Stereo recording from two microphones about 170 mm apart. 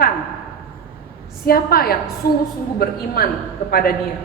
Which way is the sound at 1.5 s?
60° left (ahead or behind).